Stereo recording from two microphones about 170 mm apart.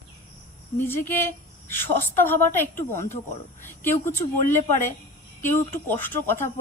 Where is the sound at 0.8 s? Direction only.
15° left (ahead or behind).